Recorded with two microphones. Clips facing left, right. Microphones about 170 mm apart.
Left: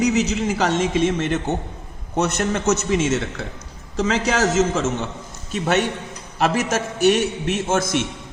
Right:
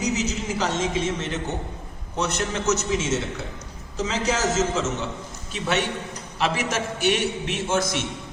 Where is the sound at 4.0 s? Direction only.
65° left (ahead or behind).